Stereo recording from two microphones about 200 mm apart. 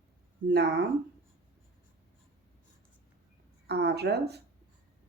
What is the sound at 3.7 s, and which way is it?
Speech, 55° right (ahead or behind).